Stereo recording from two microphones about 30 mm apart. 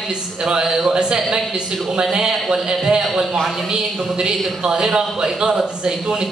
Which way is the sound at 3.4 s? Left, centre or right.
Centre.